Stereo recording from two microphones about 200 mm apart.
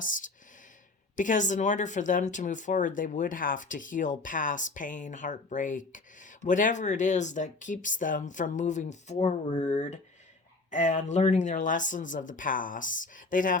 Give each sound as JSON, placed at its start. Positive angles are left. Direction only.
{"t": 1.1, "sound": "speech", "side_deg": 40}